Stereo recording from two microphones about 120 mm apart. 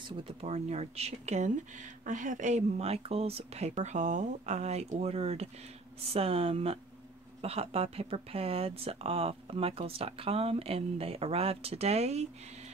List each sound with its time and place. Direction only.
0.2 s speech: 60° right (ahead or behind)
2.0 s speech: 90° right; by 12.3 s 65° right (ahead or behind)